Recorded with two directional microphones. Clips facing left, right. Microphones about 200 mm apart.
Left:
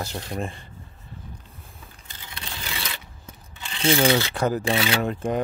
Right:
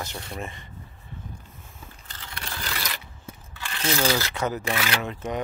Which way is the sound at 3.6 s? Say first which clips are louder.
Left 5 dB; 25° left (ahead or behind).